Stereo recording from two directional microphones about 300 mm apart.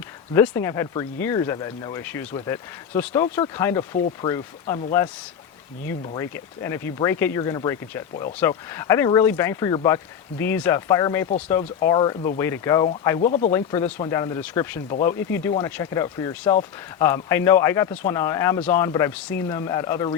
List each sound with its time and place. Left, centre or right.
0.3 s speech: centre
6.1 s speech: centre
11.3 s speech: left
11.5 s speech: centre